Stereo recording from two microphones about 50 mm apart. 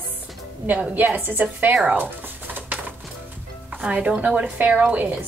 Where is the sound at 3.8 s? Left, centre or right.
Right.